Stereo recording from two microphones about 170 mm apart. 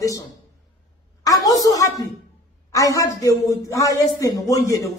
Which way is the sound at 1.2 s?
20° left (ahead or behind).